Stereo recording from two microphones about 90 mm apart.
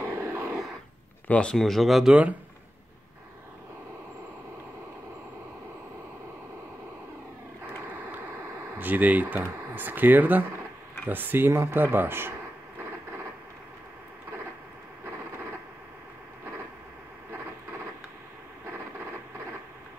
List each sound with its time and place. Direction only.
0.0 s a sound: 30° right (ahead or behind)
1.2 s speech: 15° left (ahead or behind)
8.7 s speech: 20° right (ahead or behind)